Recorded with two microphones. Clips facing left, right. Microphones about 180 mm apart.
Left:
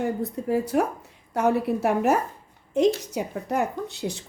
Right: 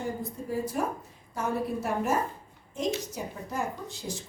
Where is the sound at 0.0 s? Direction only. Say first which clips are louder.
Left 7 dB; 70° left (ahead or behind).